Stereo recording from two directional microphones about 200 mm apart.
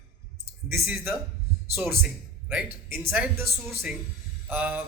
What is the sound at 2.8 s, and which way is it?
A man's voice, 10° right (ahead or behind).